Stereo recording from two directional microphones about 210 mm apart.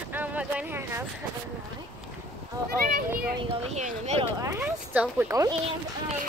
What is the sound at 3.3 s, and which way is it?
Speech, 35° right (ahead or behind).